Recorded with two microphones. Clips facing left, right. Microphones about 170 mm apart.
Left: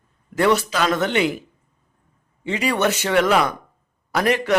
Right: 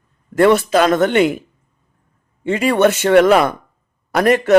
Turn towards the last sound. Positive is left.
turn(degrees=-45)  # may be behind; listen again after turning